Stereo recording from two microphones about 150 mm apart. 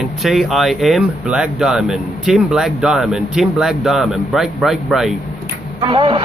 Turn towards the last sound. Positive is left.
turn(degrees=-35)  # may be behind; listen again after turning